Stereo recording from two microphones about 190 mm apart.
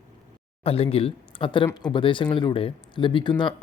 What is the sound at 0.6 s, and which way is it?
Speech, 30° left (ahead or behind).